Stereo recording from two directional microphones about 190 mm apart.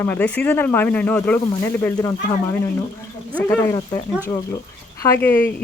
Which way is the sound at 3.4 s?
15° left (ahead or behind).